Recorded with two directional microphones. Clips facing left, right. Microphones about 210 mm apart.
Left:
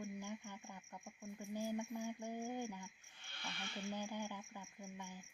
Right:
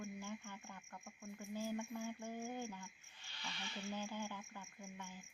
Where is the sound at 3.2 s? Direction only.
55° left (ahead or behind).